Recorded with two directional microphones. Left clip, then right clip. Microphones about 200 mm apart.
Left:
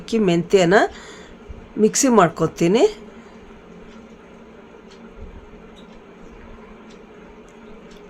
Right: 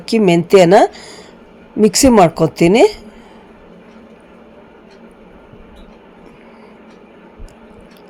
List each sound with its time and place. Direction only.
0.0 s a woman's voice: 25° right (ahead or behind)